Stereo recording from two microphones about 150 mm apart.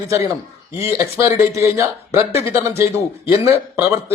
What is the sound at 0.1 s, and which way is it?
A man's voice, 20° right (ahead or behind).